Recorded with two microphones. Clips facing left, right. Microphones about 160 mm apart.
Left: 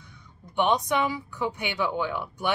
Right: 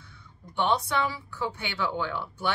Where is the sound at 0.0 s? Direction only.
15° left (ahead or behind).